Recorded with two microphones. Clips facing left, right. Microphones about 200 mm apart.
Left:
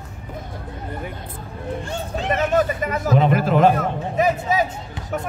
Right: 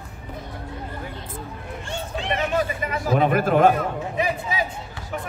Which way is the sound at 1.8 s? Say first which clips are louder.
Right 1 dB; 40° left (ahead or behind).